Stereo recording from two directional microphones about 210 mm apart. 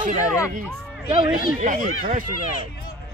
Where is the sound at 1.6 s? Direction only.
40° right (ahead or behind).